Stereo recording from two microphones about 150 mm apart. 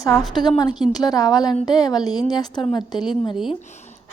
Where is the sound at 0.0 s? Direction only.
25° left (ahead or behind).